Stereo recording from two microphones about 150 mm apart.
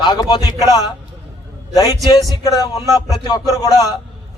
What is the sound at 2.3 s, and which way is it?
A man's voice, 25° left (ahead or behind).